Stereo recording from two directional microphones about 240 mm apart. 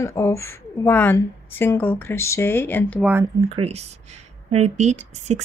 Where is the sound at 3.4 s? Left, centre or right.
Right.